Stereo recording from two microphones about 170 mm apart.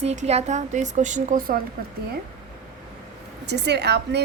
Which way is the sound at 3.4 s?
80° right.